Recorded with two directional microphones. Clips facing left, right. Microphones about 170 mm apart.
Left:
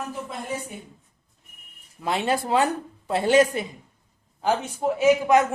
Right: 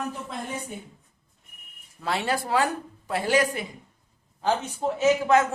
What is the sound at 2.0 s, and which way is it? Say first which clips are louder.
Speech: left 3 dB; 20° left (ahead or behind).